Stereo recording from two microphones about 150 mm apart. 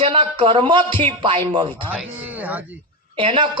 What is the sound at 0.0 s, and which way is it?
A man's voice, 35° right (ahead or behind).